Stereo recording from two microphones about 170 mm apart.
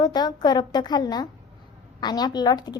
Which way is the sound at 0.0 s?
25° left (ahead or behind).